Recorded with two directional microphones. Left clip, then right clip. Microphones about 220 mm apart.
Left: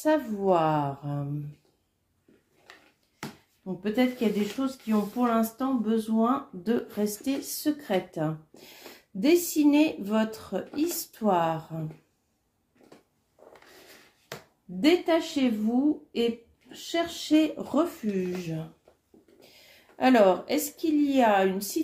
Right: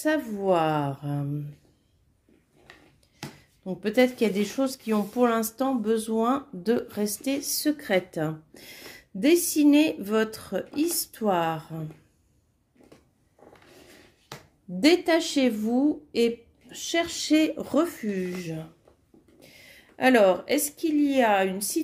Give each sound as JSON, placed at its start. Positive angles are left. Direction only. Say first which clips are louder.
{"t": 0.0, "sound": "speech", "louder": "left 1 dB", "side_deg": -35}
{"t": 2.7, "sound": "a sound", "louder": "even", "side_deg": -20}
{"t": 3.6, "sound": "speech", "louder": "right 5 dB", "side_deg": -50}
{"t": 14.8, "sound": "a woman's voice", "louder": "right 2 dB", "side_deg": -45}